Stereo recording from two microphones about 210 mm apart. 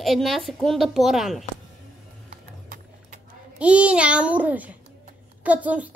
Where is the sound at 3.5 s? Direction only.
5° right (ahead or behind).